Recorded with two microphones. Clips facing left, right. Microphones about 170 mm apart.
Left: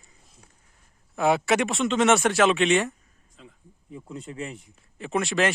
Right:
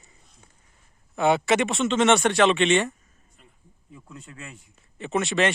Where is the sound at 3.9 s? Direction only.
25° left (ahead or behind).